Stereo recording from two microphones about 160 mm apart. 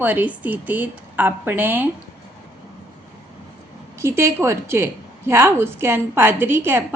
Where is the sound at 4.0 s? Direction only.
15° right (ahead or behind).